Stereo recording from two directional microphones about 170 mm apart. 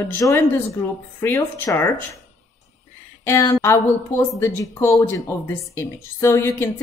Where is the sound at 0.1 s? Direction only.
20° left (ahead or behind).